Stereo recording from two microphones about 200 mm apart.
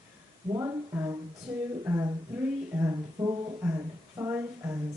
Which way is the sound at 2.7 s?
15° right (ahead or behind).